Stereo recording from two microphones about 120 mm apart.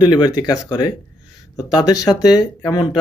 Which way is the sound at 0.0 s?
35° left (ahead or behind).